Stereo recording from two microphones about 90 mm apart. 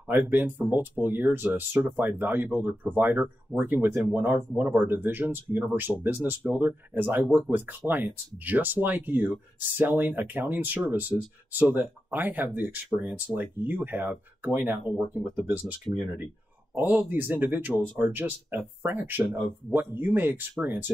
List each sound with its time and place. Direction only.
0.1 s speech: 20° right (ahead or behind)
16.9 s speech: 20° right (ahead or behind)